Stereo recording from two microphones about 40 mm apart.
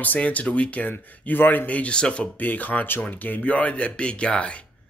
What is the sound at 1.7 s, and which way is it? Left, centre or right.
Speech, left.